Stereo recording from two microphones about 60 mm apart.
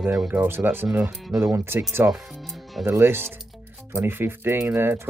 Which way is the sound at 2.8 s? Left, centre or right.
Right.